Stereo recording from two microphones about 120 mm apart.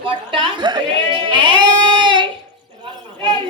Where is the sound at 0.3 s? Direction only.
45° right (ahead or behind).